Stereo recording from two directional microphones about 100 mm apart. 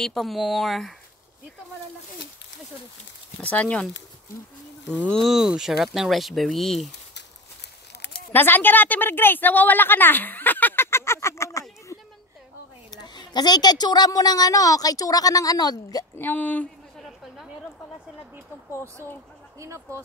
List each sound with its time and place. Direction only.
0.0 s speech: centre (ahead or behind)
3.4 s speech: 15° left (ahead or behind)
4.8 s speech: 10° left (ahead or behind)
8.3 s a woman's voice: 20° left (ahead or behind)
11.9 s a sound: 30° left (ahead or behind)
12.9 s a woman's voice: 45° left (ahead or behind)
16.2 s speech: 15° left (ahead or behind)
16.9 s a sound: centre (ahead or behind)